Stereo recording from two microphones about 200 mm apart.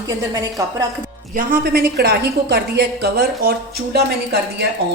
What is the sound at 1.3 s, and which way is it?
A woman's voice, 50° right (ahead or behind).